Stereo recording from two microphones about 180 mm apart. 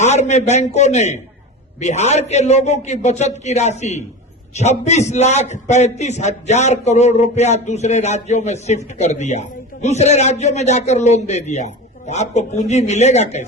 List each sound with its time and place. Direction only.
0.0 s a man's voice: 40° left (ahead or behind)